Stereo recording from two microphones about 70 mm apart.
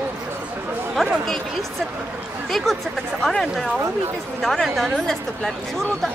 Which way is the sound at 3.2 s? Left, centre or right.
Centre.